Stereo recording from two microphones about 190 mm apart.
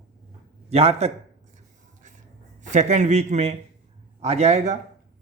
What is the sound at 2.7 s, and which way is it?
Speech, 40° right (ahead or behind).